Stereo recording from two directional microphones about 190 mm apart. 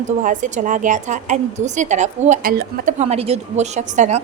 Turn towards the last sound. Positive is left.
turn(degrees=-40)  # may be behind; listen again after turning